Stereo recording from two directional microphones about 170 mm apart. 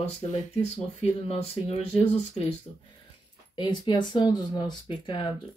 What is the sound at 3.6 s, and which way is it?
Speech, 25° left (ahead or behind).